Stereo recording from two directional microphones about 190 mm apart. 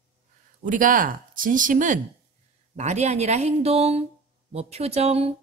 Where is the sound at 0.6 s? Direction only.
45° right (ahead or behind).